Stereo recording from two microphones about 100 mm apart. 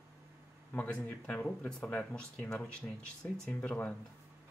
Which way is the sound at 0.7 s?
15° left (ahead or behind).